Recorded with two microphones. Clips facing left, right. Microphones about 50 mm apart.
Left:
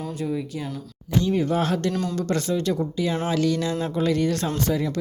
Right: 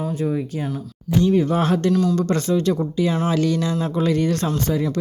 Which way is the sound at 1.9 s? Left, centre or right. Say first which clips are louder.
Right 8 dB; left.